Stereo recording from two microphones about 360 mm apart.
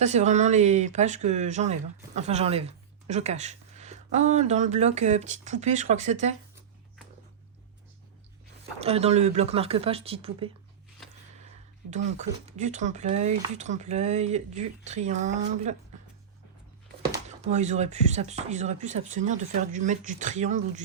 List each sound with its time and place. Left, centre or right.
0.0 s speech: centre
8.8 s speech: centre
11.9 s speech: centre
17.1 s speech: centre